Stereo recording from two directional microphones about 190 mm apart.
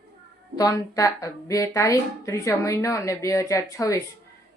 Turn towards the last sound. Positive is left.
turn(degrees=15)  # may be behind; listen again after turning